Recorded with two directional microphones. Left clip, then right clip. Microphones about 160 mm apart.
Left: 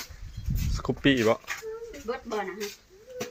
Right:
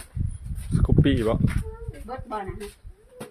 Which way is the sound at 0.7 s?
20° right (ahead or behind).